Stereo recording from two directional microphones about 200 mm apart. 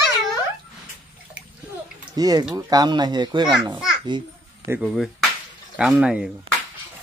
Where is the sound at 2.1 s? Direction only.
20° right (ahead or behind).